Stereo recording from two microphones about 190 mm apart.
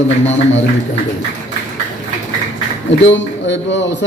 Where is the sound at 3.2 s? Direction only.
75° left (ahead or behind).